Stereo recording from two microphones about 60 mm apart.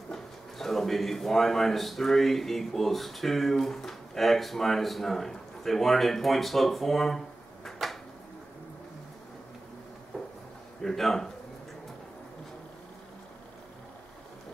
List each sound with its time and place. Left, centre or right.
0.1 s speech: centre
10.1 s a sound: centre
10.8 s a man's voice: centre